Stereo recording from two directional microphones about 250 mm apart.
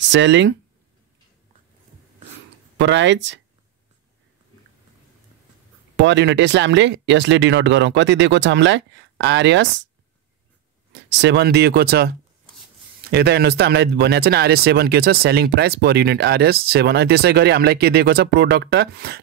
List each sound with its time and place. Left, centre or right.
0.1 s speech: right
2.8 s speech: right
5.9 s speech: right
10.9 s speech: right